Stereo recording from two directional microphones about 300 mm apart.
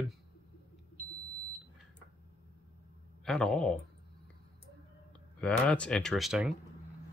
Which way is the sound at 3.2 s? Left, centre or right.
Centre.